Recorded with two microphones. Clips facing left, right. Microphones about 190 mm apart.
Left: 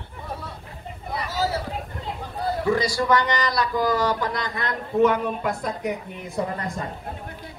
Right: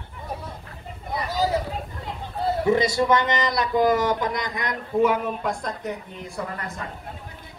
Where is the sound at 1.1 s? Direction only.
15° right (ahead or behind).